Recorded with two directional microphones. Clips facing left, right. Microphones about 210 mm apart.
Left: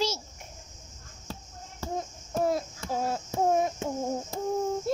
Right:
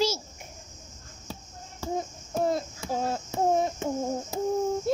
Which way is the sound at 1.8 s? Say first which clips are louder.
Right 3 dB; centre (ahead or behind).